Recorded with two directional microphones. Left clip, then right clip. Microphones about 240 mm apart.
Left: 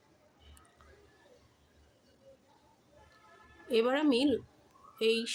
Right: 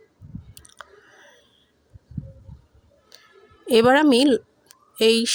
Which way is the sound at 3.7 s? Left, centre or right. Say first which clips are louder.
Right 13 dB; right.